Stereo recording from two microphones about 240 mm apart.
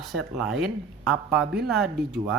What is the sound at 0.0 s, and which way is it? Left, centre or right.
Speech, centre.